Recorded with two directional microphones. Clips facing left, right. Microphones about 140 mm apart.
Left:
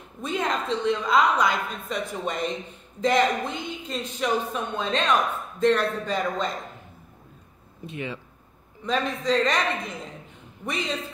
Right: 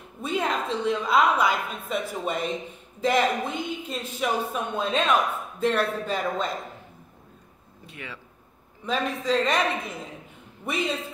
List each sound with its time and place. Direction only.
0.2 s a woman's voice: 5° right (ahead or behind)
7.8 s speech: 20° left (ahead or behind)
8.8 s a woman's voice: 5° right (ahead or behind)